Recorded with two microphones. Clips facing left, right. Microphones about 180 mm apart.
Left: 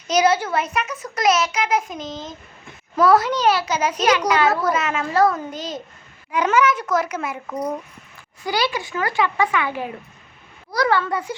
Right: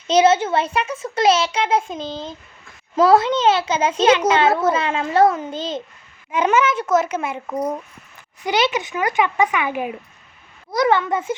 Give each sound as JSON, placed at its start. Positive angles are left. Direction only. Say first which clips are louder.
{"t": 0.1, "sound": "a child's voice", "louder": "right 3 dB", "side_deg": -25}